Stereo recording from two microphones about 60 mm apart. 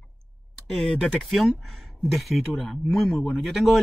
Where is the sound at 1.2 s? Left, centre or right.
Centre.